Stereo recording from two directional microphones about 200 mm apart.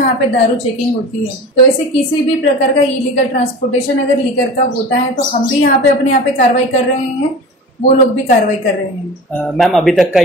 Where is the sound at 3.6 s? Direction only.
45° left (ahead or behind).